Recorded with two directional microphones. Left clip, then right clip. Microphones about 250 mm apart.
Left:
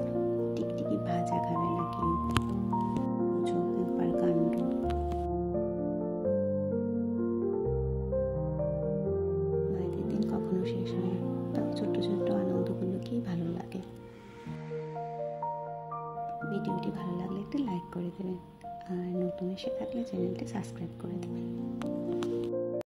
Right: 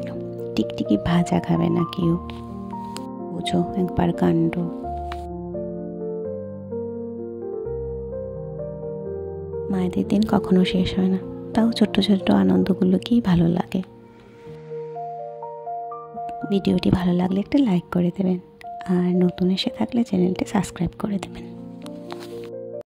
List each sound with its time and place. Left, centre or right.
0.6 s speech: right
3.4 s speech: right
9.8 s speech: right
16.4 s speech: right